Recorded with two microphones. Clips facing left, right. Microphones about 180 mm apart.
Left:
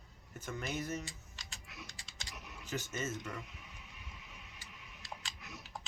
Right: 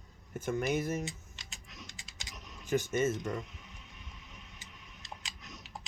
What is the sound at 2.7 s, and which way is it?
Speech, 55° right (ahead or behind).